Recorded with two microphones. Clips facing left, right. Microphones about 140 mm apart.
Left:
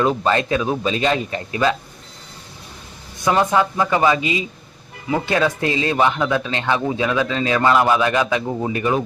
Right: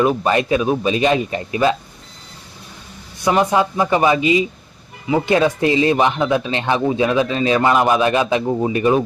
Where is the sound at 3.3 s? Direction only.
15° right (ahead or behind).